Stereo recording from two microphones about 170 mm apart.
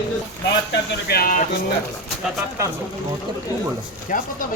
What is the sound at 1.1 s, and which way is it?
Speech, 60° left (ahead or behind).